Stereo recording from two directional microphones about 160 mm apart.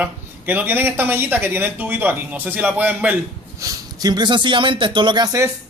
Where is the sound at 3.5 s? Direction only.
20° right (ahead or behind).